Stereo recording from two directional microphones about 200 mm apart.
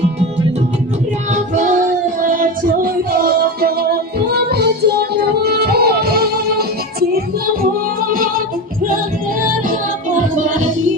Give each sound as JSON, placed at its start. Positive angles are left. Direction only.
{"t": 1.3, "sound": "child singing", "side_deg": -35}
{"t": 2.2, "sound": "music", "side_deg": -45}